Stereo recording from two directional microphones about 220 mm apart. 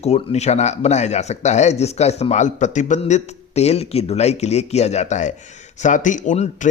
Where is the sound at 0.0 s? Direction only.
30° left (ahead or behind).